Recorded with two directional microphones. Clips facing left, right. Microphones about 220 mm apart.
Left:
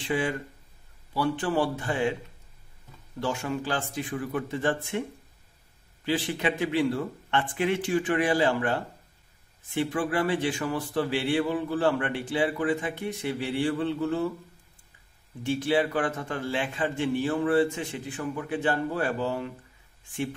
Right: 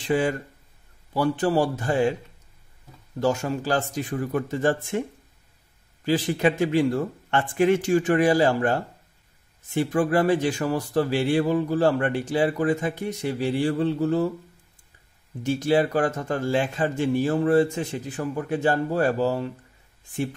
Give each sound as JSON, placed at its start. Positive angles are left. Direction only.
{"t": 0.1, "sound": "speech", "side_deg": -40}
{"t": 3.2, "sound": "speech", "side_deg": -40}
{"t": 6.0, "sound": "a man's voice", "side_deg": -40}
{"t": 15.4, "sound": "speech", "side_deg": -40}